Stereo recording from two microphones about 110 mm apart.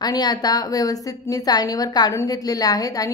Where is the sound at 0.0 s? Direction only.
35° left (ahead or behind).